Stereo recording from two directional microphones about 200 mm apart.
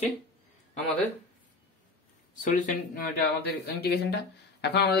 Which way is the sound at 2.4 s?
45° left (ahead or behind).